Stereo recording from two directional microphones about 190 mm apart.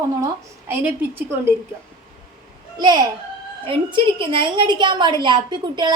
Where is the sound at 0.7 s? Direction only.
10° right (ahead or behind).